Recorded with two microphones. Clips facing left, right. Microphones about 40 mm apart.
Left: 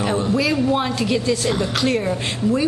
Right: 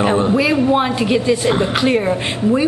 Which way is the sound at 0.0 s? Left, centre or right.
Right.